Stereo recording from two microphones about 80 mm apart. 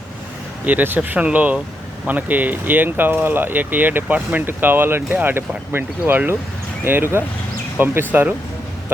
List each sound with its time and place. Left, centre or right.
0.6 s speech: right